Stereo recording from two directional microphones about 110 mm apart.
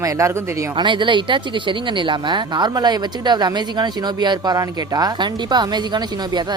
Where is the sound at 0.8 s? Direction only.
45° right (ahead or behind).